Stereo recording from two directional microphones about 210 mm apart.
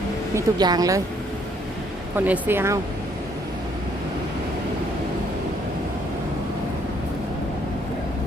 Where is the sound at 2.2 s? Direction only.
10° right (ahead or behind).